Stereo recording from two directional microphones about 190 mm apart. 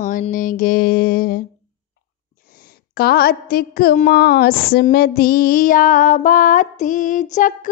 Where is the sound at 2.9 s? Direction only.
55° left (ahead or behind).